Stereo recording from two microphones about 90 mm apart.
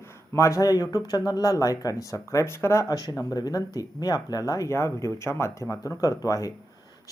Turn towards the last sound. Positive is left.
turn(degrees=40)  # may be behind; listen again after turning